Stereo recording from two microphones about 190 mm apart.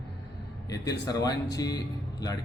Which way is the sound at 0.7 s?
20° left (ahead or behind).